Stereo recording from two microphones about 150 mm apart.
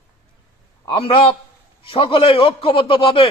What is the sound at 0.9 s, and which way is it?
A man's voice, 35° left (ahead or behind).